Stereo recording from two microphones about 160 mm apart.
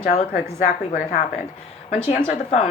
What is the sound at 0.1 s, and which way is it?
A woman's voice, 50° left (ahead or behind).